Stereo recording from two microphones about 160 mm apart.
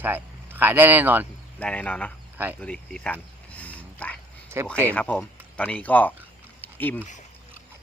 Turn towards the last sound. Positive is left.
turn(degrees=10)  # may be behind; listen again after turning